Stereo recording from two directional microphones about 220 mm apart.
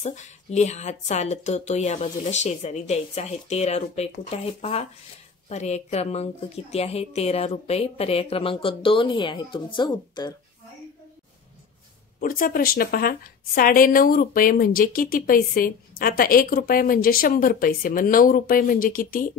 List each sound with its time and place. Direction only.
0.0 s a woman's voice: 30° left (ahead or behind)
12.2 s speech: 40° left (ahead or behind)